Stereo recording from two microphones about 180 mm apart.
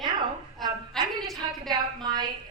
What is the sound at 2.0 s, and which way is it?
Speech, 20° right (ahead or behind).